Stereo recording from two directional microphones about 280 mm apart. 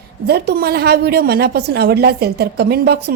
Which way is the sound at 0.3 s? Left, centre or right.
Right.